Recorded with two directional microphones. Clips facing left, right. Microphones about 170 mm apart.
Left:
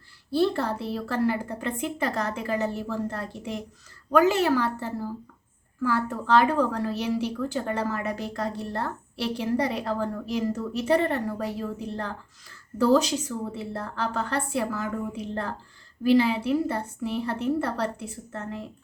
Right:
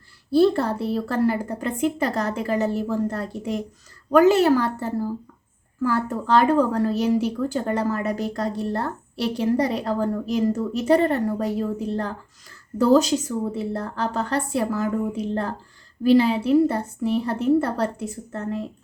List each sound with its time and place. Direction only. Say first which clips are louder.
0.3 s a woman's voice: right 6 dB; 40° right (ahead or behind)
12.8 s a woman's voice: right 4 dB; 45° right (ahead or behind)